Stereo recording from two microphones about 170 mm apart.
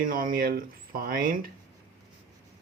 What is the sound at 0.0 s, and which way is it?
Speech, 55° right (ahead or behind).